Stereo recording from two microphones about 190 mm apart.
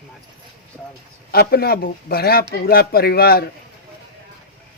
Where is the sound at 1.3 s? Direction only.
55° left (ahead or behind).